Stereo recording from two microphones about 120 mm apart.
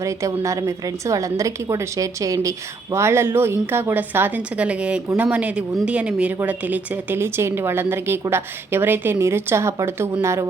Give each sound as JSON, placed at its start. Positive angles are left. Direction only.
{"t": 0.0, "sound": "a woman's voice", "side_deg": -25}